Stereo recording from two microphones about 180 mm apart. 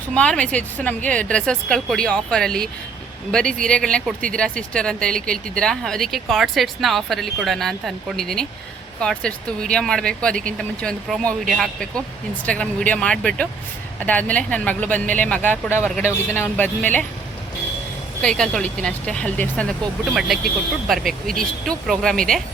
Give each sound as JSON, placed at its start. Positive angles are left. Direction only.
{"t": 0.1, "sound": "speech", "side_deg": 5}
{"t": 18.2, "sound": "speech", "side_deg": 5}